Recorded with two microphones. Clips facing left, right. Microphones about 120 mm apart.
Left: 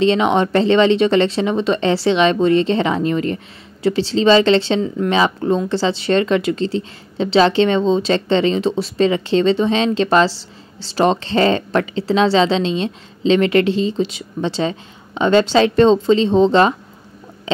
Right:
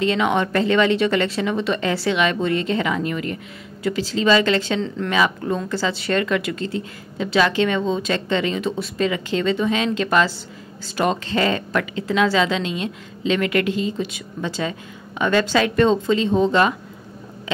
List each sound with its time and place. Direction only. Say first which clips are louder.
0.0 s speech: left 5 dB; 25° left (ahead or behind)
4.8 s speech: left 6 dB; 15° left (ahead or behind)
5.1 s speech: left 4 dB; 30° left (ahead or behind)